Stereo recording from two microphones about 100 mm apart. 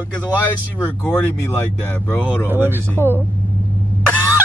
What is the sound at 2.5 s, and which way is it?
Speech, 20° right (ahead or behind).